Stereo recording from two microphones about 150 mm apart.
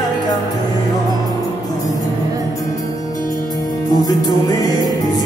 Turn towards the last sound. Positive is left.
turn(degrees=25)  # may be behind; listen again after turning